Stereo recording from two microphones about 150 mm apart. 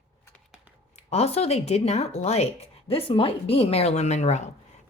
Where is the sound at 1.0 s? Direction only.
45° left (ahead or behind).